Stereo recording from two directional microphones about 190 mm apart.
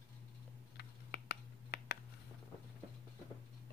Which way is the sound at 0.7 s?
60° left (ahead or behind).